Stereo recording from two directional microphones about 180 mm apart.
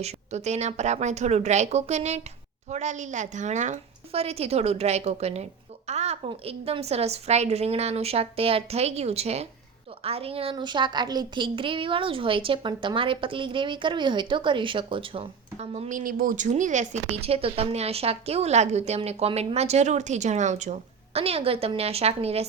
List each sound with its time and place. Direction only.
0.0 s a woman's voice: 40° right (ahead or behind)